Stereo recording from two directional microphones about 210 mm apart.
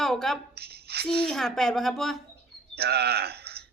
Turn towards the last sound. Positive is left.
turn(degrees=-50)  # may be behind; listen again after turning